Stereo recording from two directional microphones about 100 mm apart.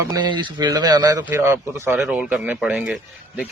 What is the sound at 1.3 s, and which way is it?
Speech, 25° right (ahead or behind).